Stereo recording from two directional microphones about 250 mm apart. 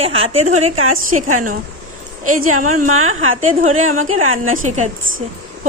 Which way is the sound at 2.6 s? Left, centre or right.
Right.